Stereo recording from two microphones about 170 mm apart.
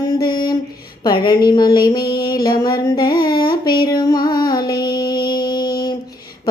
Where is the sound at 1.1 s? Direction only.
25° left (ahead or behind).